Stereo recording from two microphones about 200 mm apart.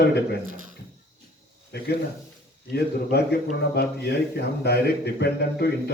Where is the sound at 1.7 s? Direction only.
55° left (ahead or behind).